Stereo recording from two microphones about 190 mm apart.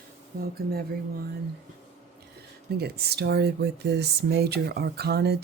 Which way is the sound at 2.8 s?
55° right (ahead or behind).